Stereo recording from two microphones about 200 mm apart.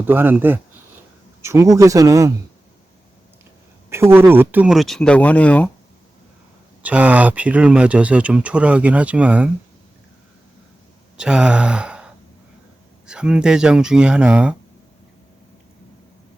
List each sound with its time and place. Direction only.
0.0 s speech: 10° right (ahead or behind)
3.8 s speech: 10° right (ahead or behind); by 5.7 s 5° left (ahead or behind)
6.8 s speech: 5° right (ahead or behind)
11.2 s speech: 5° right (ahead or behind)
13.1 s speech: 5° right (ahead or behind)